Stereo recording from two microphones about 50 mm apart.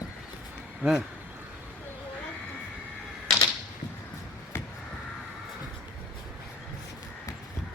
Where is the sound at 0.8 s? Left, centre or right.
Right.